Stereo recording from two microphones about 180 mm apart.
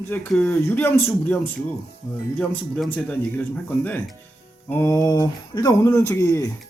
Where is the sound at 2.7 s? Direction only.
10° left (ahead or behind).